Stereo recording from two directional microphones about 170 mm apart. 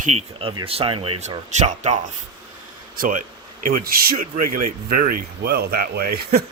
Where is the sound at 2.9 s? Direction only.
55° right (ahead or behind).